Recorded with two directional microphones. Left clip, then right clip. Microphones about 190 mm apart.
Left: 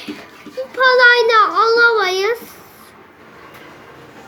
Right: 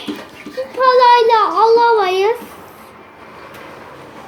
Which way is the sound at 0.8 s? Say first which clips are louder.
Right 1 dB; 15° left (ahead or behind).